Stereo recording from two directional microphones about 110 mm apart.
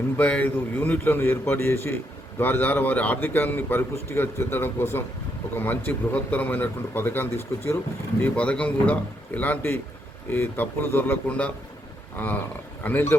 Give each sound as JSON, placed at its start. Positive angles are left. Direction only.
{"t": 0.2, "sound": "a man's voice", "side_deg": 15}